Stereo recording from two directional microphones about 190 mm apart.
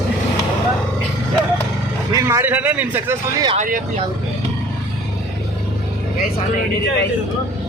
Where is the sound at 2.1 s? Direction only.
15° right (ahead or behind).